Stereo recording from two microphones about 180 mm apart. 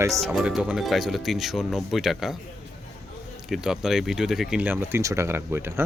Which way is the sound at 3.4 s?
Centre (ahead or behind).